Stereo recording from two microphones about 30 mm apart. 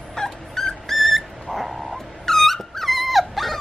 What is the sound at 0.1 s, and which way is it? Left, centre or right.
Dog, centre.